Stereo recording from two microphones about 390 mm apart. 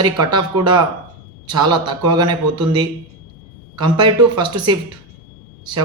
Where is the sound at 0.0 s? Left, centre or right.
Centre.